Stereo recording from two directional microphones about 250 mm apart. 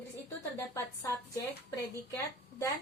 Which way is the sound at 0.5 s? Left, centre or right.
Centre.